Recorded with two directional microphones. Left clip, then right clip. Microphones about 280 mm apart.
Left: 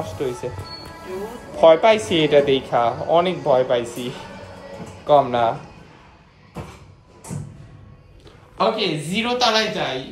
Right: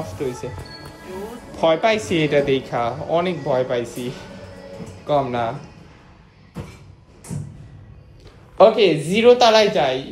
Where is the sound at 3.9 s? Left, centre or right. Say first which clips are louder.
Even; left.